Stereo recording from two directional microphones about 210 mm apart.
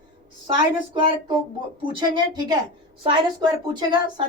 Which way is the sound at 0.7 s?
25° right (ahead or behind).